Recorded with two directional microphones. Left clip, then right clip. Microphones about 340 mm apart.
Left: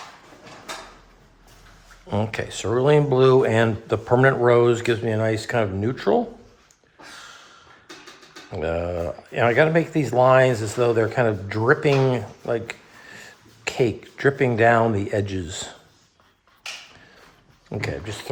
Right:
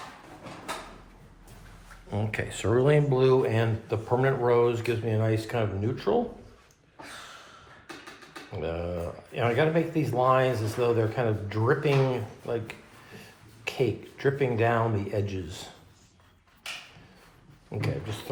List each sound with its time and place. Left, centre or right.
2.0 s speech: centre
8.5 s speech: left
17.7 s speech: left